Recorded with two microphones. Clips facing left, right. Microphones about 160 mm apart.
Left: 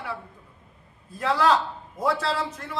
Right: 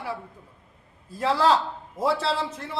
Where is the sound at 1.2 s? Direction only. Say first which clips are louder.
Even; 30° right (ahead or behind).